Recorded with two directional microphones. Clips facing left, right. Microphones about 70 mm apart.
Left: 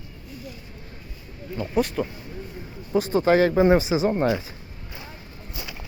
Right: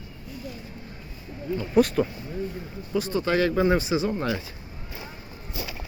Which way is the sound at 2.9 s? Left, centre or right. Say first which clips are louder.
Left 5 dB; left.